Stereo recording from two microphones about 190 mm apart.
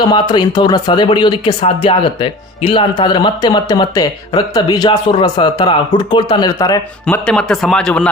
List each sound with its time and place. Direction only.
0.0 s speech: 20° left (ahead or behind)
7.1 s speech: 5° left (ahead or behind)